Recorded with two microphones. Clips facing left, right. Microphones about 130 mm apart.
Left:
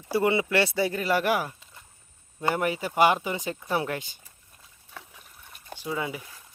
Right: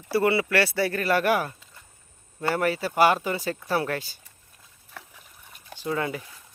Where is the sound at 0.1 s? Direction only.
15° left (ahead or behind).